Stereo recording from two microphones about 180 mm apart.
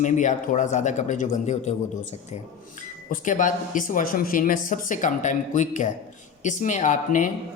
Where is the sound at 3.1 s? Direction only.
45° left (ahead or behind).